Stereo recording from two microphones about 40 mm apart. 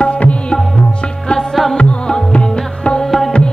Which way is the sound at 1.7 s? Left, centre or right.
Left.